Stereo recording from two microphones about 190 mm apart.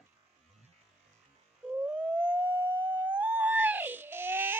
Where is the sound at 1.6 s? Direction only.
10° right (ahead or behind).